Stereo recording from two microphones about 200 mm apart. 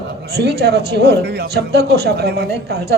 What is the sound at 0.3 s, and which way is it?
A woman's voice, 55° right (ahead or behind).